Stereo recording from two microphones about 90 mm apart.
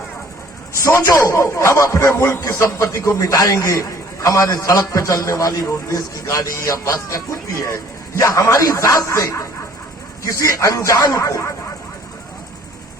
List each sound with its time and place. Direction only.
1.2 s speech: 30° left (ahead or behind)
8.2 s speech: 40° left (ahead or behind)